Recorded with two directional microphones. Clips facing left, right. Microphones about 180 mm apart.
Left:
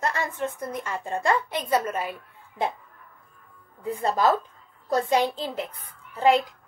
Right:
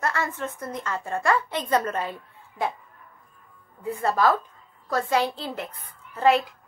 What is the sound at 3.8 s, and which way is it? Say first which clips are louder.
Speech: right 1 dB; 20° left (ahead or behind).